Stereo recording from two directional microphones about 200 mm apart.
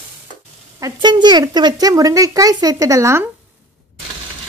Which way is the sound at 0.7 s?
20° right (ahead or behind).